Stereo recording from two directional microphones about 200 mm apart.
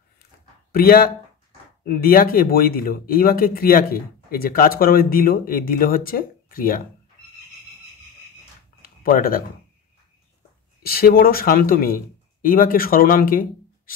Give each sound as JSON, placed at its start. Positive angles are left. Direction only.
{"t": 0.7, "sound": "speech", "side_deg": 50}
{"t": 8.8, "sound": "a sound", "side_deg": 45}
{"t": 10.8, "sound": "a man's voice", "side_deg": 50}